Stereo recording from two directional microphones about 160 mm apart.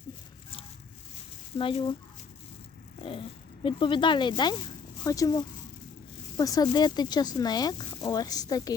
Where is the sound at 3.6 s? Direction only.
30° left (ahead or behind).